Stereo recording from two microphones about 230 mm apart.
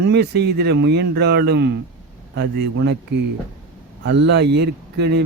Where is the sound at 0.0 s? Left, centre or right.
Right.